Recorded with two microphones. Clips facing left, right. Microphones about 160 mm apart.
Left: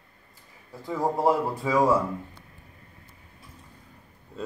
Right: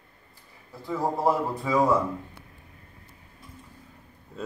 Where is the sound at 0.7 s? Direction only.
15° left (ahead or behind).